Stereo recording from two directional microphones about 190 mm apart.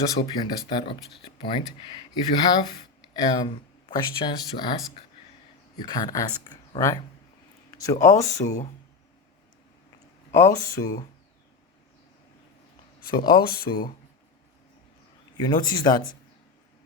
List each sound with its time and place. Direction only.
0.0 s speech: 20° left (ahead or behind)
5.8 s speech: 20° left (ahead or behind)
8.0 s speech: 15° left (ahead or behind)
10.3 s speech: 15° left (ahead or behind)
13.1 s speech: 25° left (ahead or behind)
15.4 s speech: 20° left (ahead or behind)